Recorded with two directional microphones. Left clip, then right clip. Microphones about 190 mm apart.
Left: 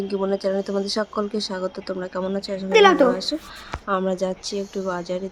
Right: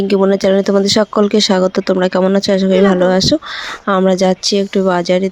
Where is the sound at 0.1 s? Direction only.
30° right (ahead or behind).